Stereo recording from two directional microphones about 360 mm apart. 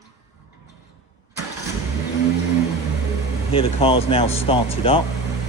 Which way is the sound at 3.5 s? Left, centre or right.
Centre.